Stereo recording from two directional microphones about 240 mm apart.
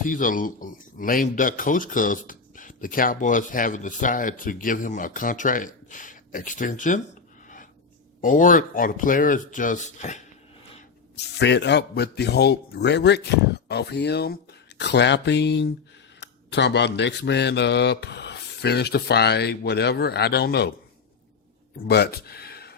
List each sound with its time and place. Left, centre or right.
0.0 s speech: left
8.2 s speech: left
11.3 s speech: left
21.8 s speech: left